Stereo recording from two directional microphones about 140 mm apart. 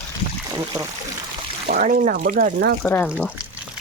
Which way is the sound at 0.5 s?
25° right (ahead or behind).